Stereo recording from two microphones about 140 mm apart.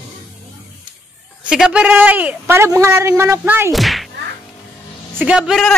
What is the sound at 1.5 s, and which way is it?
A man's voice, 5° right (ahead or behind).